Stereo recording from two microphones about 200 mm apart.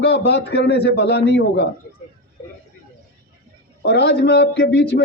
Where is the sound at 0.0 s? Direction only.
60° left (ahead or behind).